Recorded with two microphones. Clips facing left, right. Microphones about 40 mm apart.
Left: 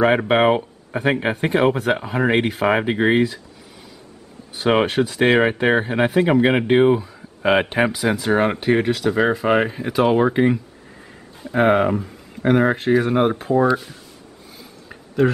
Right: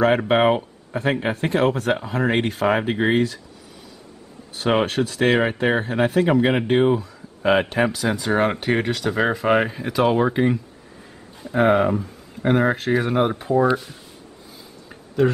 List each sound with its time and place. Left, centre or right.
0.0 s speech: centre
4.6 s speech: centre
12.9 s speech: centre